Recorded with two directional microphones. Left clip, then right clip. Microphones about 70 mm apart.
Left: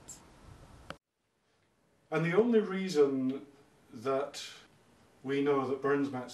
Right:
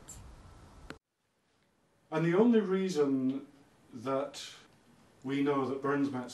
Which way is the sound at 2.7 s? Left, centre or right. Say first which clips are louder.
Right 2 dB; left.